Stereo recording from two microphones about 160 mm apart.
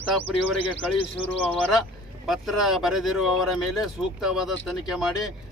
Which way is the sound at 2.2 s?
Centre (ahead or behind).